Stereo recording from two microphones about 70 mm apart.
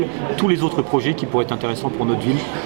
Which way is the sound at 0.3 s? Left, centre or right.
Centre.